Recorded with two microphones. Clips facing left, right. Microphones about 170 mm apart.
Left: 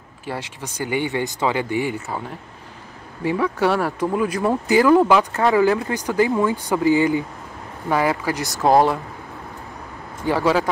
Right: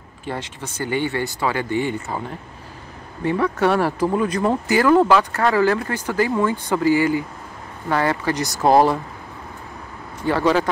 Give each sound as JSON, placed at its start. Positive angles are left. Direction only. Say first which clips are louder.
{"t": 0.2, "sound": "speech", "louder": "right 1 dB", "side_deg": 10}
{"t": 3.3, "sound": "speech", "louder": "right 1 dB", "side_deg": 10}
{"t": 4.6, "sound": "speech", "louder": "left 1 dB", "side_deg": 15}
{"t": 7.9, "sound": "speech", "louder": "even", "side_deg": 10}
{"t": 10.2, "sound": "speech", "louder": "right 1 dB", "side_deg": 10}